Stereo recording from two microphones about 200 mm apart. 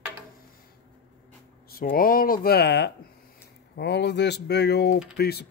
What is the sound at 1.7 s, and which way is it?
Speech, 45° left (ahead or behind).